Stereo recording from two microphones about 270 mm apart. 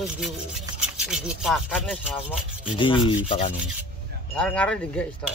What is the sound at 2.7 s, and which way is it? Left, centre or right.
Speech, centre.